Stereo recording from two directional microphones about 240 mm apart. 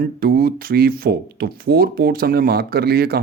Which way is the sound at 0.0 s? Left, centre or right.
Right.